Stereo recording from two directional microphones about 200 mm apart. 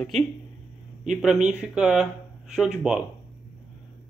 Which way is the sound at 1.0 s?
5° right (ahead or behind).